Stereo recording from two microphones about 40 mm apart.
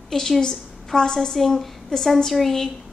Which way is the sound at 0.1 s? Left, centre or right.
Centre.